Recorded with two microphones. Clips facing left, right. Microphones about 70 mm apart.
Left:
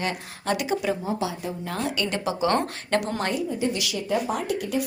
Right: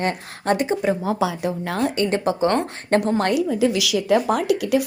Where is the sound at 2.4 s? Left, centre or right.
Right.